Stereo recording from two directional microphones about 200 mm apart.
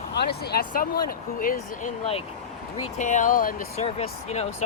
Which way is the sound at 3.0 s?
40° left (ahead or behind).